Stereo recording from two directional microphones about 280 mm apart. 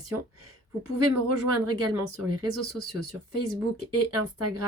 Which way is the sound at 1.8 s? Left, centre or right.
Right.